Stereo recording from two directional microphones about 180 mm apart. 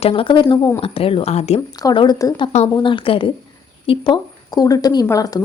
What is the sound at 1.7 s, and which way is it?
A woman's voice, 25° left (ahead or behind).